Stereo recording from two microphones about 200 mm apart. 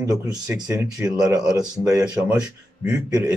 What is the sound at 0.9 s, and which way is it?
Speech, 5° right (ahead or behind).